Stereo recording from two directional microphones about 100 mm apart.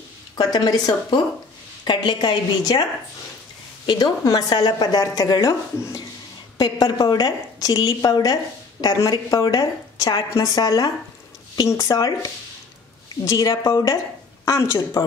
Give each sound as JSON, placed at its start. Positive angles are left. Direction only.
{"t": 0.4, "sound": "a woman's voice", "side_deg": 45}
{"t": 3.8, "sound": "a woman's voice", "side_deg": 50}
{"t": 4.2, "sound": "a woman's voice", "side_deg": 35}
{"t": 6.6, "sound": "a woman's voice", "side_deg": 45}